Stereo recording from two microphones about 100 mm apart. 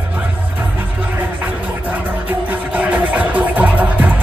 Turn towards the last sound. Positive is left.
turn(degrees=-15)  # may be behind; listen again after turning